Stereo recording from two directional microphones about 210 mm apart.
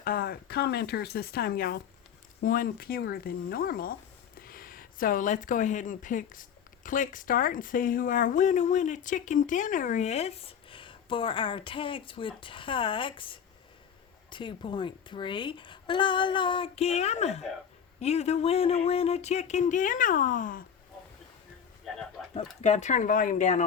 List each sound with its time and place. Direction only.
0.0 s a woman's voice: 45° left (ahead or behind)
22.6 s speech: 35° left (ahead or behind)